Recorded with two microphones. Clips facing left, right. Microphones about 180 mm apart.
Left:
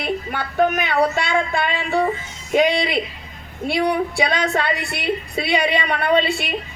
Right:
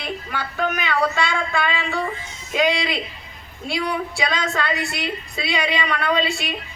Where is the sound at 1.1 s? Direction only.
55° left (ahead or behind).